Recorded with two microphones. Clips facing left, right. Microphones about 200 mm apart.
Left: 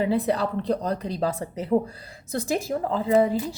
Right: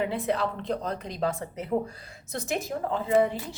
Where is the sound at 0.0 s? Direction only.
35° left (ahead or behind).